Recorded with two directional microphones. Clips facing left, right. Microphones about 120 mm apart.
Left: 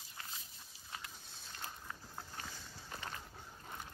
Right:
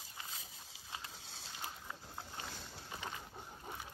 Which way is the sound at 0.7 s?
90° right.